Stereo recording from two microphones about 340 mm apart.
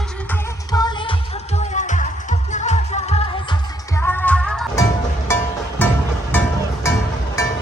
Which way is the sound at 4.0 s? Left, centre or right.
Centre.